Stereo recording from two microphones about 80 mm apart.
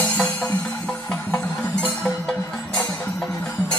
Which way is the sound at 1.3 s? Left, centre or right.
Left.